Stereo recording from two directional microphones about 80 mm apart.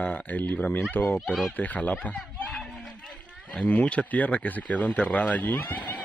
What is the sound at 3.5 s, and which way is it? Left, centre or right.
Speech, centre.